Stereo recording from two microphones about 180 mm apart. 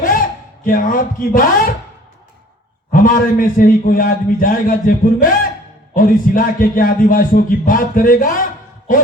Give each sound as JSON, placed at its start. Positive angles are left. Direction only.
{"t": 0.0, "sound": "speech", "side_deg": 50}
{"t": 2.9, "sound": "a man's voice", "side_deg": 50}